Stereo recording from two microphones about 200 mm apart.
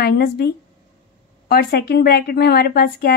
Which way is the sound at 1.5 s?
50° left (ahead or behind).